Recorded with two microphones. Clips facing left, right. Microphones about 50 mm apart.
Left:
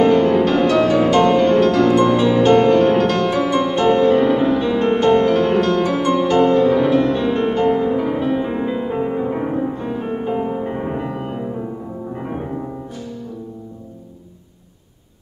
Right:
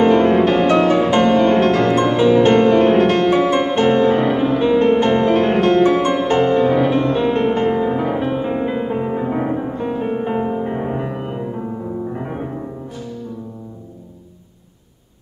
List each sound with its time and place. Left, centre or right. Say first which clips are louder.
0.2 s music: right 1 dB; right
1.5 s music: left 1 dB; right; by 2.8 s centre
2.8 s music: right 2 dB; right
5.3 s music: right 2 dB; right
6.7 s music: even; centre
10.6 s music: right 1 dB; centre